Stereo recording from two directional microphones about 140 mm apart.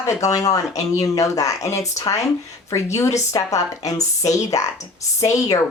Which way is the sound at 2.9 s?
20° left (ahead or behind).